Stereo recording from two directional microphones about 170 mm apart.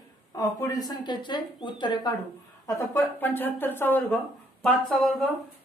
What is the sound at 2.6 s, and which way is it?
Speech, 15° left (ahead or behind).